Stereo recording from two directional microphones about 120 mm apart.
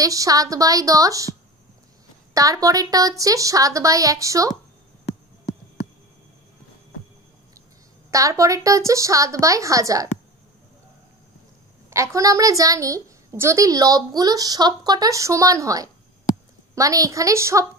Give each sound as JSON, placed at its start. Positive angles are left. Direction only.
{"t": 0.0, "sound": "a woman's voice", "side_deg": -30}
{"t": 2.3, "sound": "a woman's voice", "side_deg": -30}
{"t": 8.1, "sound": "a woman's voice", "side_deg": -25}
{"t": 11.9, "sound": "a woman's voice", "side_deg": -25}
{"t": 16.3, "sound": "a sound", "side_deg": 35}
{"t": 16.7, "sound": "a woman's voice", "side_deg": -30}